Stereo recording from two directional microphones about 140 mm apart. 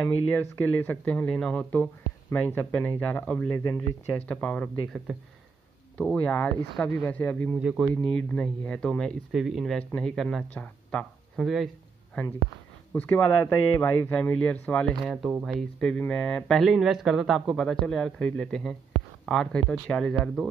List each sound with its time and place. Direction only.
0.0 s speech: 15° left (ahead or behind)
3.5 s speech: 25° left (ahead or behind)
4.3 s speech: 10° left (ahead or behind)
7.5 s speech: 5° right (ahead or behind)
7.9 s speech: 5° left (ahead or behind)
12.9 s speech: 10° left (ahead or behind)